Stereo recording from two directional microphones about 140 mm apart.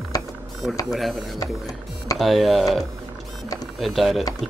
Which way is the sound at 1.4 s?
25° left (ahead or behind).